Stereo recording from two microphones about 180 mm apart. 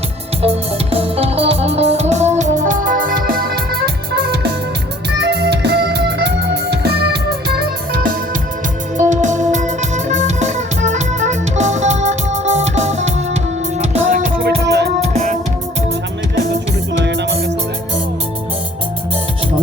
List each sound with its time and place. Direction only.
0.4 s music: 30° right (ahead or behind); by 7.5 s 60° right (ahead or behind)
9.0 s music: 40° right (ahead or behind)
14.6 s music: 70° right (ahead or behind)
15.0 s music: 40° right (ahead or behind)
17.0 s music: 75° right (ahead or behind)